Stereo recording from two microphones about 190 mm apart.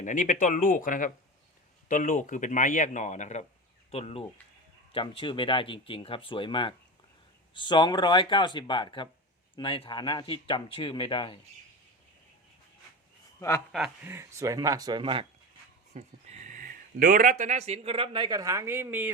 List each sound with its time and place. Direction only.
0.0 s a man's voice: 40° left (ahead or behind); by 11.3 s 25° left (ahead or behind)
13.7 s speech: centre (ahead or behind)
14.1 s speech: 15° right (ahead or behind)